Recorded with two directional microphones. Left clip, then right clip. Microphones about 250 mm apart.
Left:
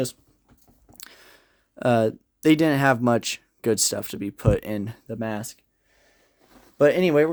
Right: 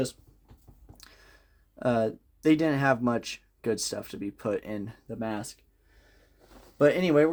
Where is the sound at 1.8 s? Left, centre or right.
Left.